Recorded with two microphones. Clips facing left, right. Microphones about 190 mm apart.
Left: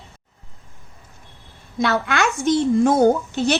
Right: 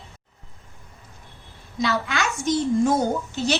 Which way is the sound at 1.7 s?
60° left (ahead or behind).